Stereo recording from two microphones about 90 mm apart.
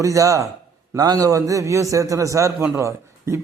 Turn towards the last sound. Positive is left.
turn(degrees=-35)  # may be behind; listen again after turning